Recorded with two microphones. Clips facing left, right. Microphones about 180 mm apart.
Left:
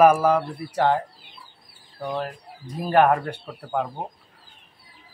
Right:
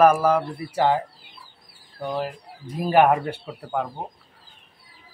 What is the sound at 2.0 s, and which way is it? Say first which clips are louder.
Speech: right 1 dB; centre (ahead or behind).